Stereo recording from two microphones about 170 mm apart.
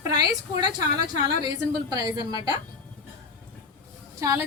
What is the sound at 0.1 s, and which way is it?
Speech, 25° right (ahead or behind).